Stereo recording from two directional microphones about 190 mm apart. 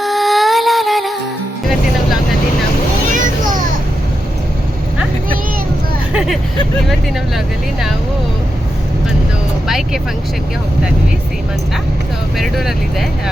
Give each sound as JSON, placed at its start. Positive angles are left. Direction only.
{"t": 0.0, "sound": "music", "side_deg": 0}
{"t": 3.1, "sound": "vehicle", "side_deg": -45}
{"t": 6.1, "sound": "vehicle", "side_deg": 0}
{"t": 7.3, "sound": "speech", "side_deg": 0}
{"t": 9.6, "sound": "speech", "side_deg": 0}
{"t": 12.4, "sound": "speech", "side_deg": 0}